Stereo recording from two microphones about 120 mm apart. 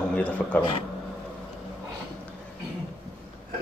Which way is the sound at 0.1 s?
10° left (ahead or behind).